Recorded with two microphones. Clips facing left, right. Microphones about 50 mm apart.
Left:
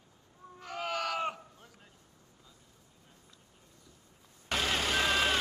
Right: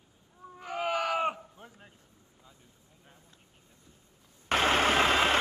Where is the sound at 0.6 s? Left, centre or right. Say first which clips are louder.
Right 5 dB; centre.